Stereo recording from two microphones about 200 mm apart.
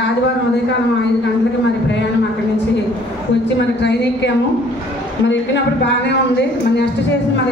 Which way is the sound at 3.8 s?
60° left (ahead or behind).